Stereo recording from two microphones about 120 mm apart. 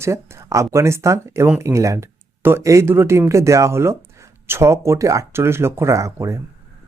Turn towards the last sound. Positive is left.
turn(degrees=-25)  # may be behind; listen again after turning